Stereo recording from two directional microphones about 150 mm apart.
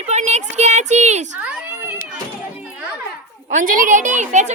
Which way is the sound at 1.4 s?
10° right (ahead or behind).